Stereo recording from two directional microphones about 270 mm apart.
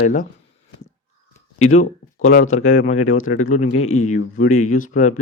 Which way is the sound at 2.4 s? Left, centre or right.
Left.